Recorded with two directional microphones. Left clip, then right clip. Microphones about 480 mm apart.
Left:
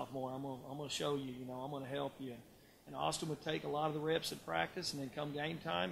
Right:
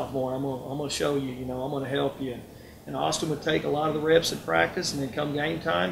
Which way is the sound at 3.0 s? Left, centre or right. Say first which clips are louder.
Right 12 dB; left.